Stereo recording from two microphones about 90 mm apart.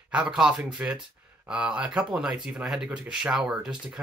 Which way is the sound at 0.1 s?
10° right (ahead or behind).